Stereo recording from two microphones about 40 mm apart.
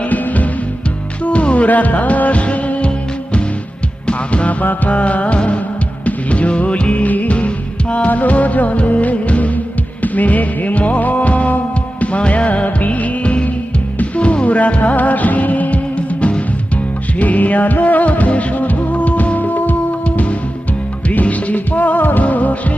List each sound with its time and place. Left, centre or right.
0.0 s music: left
1.2 s music: left
4.0 s music: left
12.5 s music: left
20.1 s music: left
22.2 s music of bollywood: left